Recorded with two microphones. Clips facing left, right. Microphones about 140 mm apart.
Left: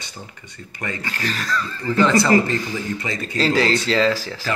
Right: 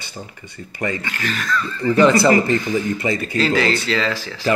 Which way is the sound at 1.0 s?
35° left (ahead or behind).